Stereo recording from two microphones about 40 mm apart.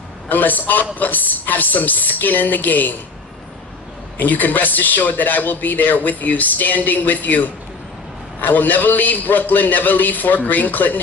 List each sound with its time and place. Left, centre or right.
0.3 s speech: left
4.2 s speech: left